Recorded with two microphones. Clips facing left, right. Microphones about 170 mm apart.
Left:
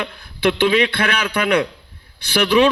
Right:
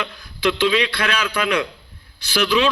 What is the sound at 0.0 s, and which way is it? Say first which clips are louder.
A man's voice: left 2 dB; 55° left (ahead or behind).